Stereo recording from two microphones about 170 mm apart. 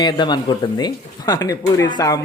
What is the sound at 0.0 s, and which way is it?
Speech, 25° left (ahead or behind).